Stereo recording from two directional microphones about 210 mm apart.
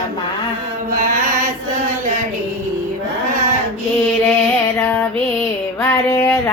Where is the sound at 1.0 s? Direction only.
35° right (ahead or behind).